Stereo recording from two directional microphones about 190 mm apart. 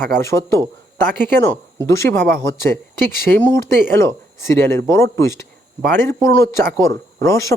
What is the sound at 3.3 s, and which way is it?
Speech, 10° left (ahead or behind).